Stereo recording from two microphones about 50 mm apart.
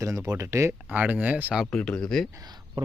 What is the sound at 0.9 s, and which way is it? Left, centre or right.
Speech, right.